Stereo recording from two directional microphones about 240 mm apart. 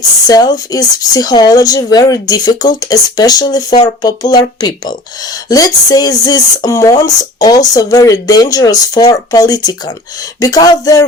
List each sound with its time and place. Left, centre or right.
0.3 s speech: centre